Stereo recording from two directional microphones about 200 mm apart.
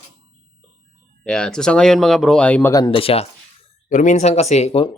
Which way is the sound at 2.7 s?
20° left (ahead or behind).